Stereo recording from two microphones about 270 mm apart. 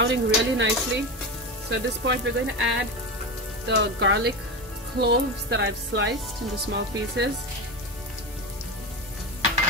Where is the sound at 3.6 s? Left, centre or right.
Right.